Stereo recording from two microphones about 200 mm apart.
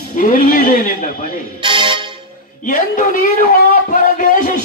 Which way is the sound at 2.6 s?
40° left (ahead or behind).